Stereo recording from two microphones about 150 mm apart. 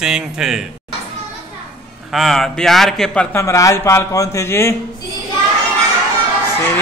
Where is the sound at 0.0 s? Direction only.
5° right (ahead or behind).